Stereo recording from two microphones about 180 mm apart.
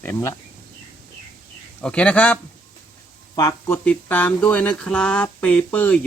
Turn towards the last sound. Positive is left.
turn(degrees=10)  # may be behind; listen again after turning